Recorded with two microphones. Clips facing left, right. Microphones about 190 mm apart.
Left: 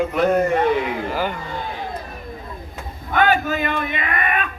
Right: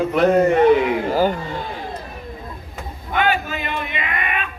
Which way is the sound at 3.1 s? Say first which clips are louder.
Left 2 dB; 45° left (ahead or behind).